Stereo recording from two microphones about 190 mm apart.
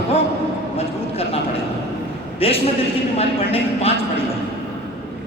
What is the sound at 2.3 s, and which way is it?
A man's voice, 30° left (ahead or behind).